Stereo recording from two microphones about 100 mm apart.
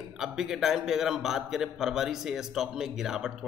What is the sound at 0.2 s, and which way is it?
A man's voice, 5° right (ahead or behind).